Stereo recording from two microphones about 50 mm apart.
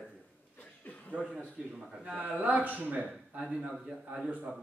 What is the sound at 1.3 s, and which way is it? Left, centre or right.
Speech, centre.